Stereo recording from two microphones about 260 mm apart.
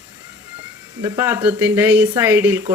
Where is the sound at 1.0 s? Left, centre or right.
Centre.